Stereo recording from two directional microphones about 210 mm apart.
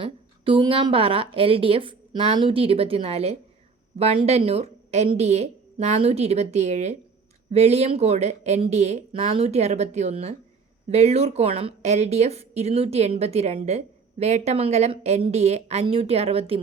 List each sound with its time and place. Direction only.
0.0 s a woman's voice: 25° right (ahead or behind)